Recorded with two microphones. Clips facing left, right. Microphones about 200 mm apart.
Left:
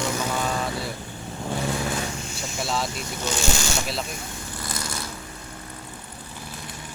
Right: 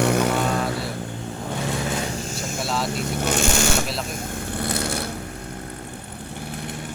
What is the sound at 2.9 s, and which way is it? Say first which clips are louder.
Vehicle: right 6 dB; 55° right (ahead or behind).